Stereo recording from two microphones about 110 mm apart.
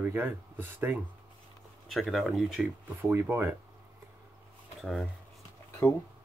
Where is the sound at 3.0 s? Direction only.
20° right (ahead or behind).